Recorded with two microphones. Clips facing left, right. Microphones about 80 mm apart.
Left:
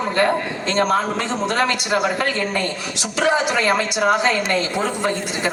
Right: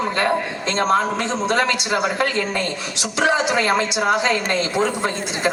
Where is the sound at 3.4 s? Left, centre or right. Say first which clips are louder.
Even; right.